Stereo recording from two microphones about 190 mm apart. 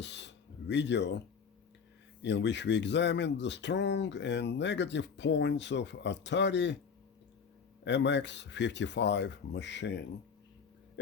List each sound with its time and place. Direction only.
0.0 s music: 70° left (ahead or behind)
2.2 s speech: 65° left (ahead or behind)
7.9 s speech: 65° left (ahead or behind)